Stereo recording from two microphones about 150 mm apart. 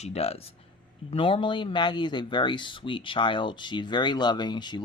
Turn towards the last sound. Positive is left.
turn(degrees=30)  # may be behind; listen again after turning